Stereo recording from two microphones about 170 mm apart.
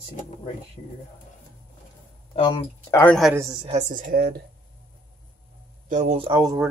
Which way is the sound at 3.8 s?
55° right (ahead or behind).